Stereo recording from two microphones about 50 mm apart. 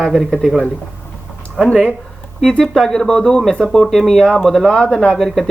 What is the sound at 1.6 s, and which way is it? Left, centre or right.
Speech, centre.